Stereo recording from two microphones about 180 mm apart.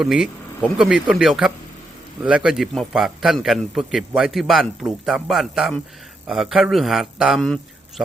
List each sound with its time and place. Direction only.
0.0 s a man's voice: centre (ahead or behind)